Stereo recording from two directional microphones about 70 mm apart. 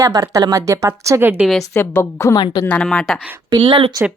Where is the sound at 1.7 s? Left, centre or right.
Left.